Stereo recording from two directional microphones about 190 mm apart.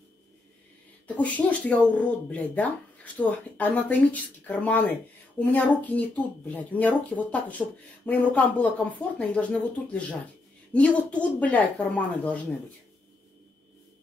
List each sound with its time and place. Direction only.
1.0 s speech: 5° left (ahead or behind)